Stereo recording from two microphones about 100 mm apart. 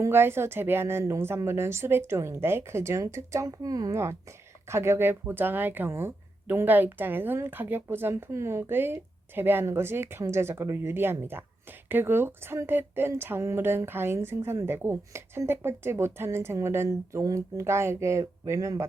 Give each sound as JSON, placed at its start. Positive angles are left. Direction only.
{"t": 0.0, "sound": "speech", "side_deg": -25}